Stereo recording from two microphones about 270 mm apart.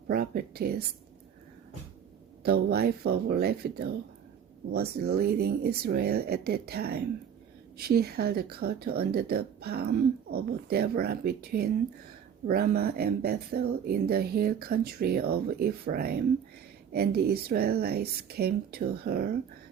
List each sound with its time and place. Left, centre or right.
0.1 s speech: right
2.4 s speech: right